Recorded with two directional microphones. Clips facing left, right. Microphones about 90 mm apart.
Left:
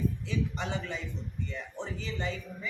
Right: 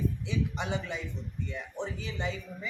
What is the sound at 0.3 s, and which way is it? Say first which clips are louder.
Speech: right 1 dB; 15° right (ahead or behind).